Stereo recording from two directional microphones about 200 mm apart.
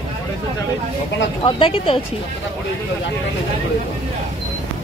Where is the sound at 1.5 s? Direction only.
25° left (ahead or behind).